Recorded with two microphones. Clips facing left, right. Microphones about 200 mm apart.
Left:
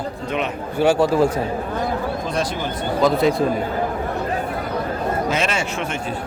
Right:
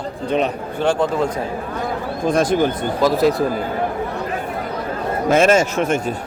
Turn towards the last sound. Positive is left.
turn(degrees=-45)  # may be behind; listen again after turning